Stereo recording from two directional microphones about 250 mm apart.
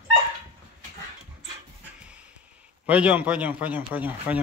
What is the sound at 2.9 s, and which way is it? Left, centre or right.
A man's voice, centre.